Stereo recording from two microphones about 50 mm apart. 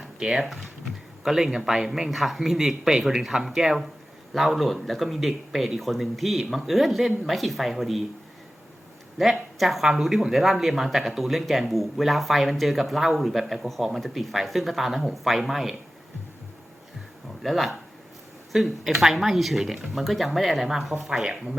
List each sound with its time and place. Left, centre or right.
0.0 s a sound: centre
0.4 s speech: centre
9.1 s speech: centre
17.4 s speech: centre